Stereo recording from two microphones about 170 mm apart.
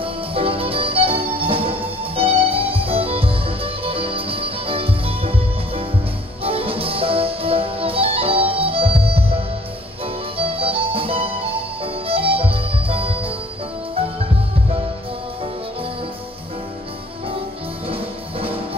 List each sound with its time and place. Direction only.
0.0 s music: 35° right (ahead or behind)
17.8 s music: 35° right (ahead or behind)